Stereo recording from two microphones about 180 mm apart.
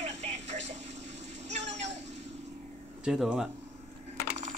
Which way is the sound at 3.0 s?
5° right (ahead or behind).